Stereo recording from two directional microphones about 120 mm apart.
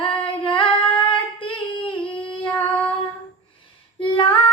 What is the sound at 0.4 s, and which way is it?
Child singing, 45° left (ahead or behind).